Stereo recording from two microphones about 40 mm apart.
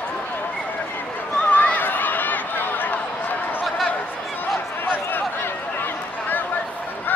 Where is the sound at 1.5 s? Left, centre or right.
Left.